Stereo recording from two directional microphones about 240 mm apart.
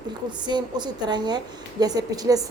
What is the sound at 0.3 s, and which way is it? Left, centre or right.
A woman's voice, centre.